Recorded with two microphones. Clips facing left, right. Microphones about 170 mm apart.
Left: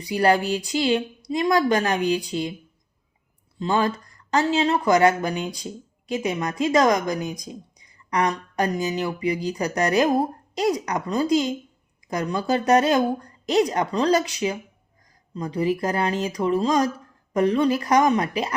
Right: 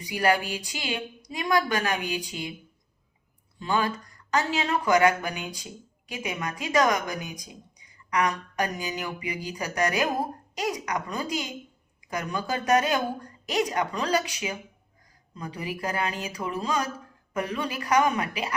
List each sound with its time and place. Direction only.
0.1 s speech: 35° left (ahead or behind)
3.6 s speech: 35° left (ahead or behind)